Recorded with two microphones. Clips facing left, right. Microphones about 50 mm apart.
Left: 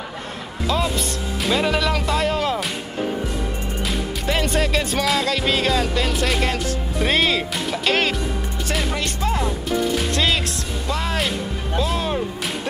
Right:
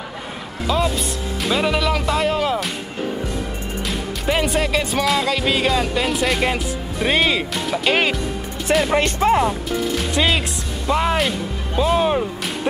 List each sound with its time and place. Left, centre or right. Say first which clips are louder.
0.7 s speech: right 2 dB; centre
4.3 s music: right 2 dB; centre
7.0 s speech: right 1 dB; centre
8.9 s speech: right 8 dB; right
10.1 s speech: right 5 dB; centre
10.9 s speech: right 5 dB; right